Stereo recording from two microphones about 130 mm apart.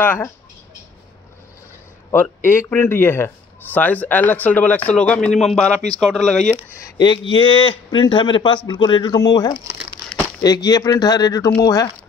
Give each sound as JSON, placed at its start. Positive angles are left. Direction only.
{"t": 0.0, "sound": "speech", "side_deg": 15}
{"t": 2.0, "sound": "speech", "side_deg": 20}
{"t": 6.5, "sound": "speech", "side_deg": 20}
{"t": 7.0, "sound": "speech", "side_deg": 35}